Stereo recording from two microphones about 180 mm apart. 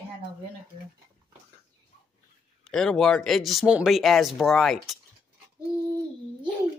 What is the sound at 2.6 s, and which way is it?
Speech, centre (ahead or behind).